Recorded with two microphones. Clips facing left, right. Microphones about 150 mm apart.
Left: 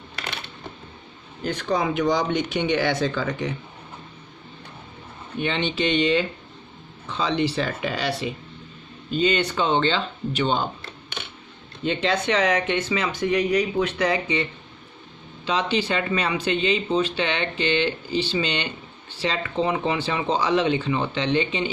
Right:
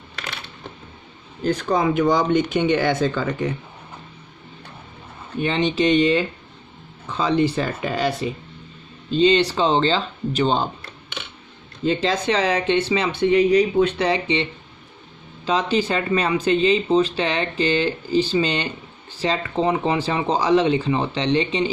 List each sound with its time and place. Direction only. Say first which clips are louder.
1.5 s speech: right 4 dB; 50° right (ahead or behind)
5.4 s speech: right 4 dB; 40° right (ahead or behind)
9.1 s speech: right 5 dB; 30° right (ahead or behind)
11.9 s speech: right 2 dB; 35° right (ahead or behind)
15.4 s speech: right 3 dB; 40° right (ahead or behind)